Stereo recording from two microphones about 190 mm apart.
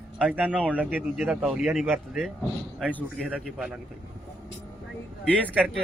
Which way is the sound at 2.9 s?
10° left (ahead or behind).